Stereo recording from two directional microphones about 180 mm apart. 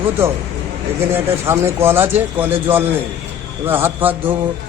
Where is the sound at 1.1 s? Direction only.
15° right (ahead or behind).